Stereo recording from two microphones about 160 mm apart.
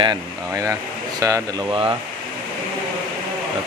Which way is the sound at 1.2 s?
20° right (ahead or behind).